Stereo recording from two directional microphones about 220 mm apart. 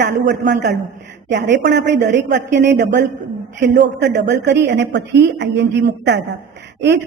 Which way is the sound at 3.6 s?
50° right (ahead or behind).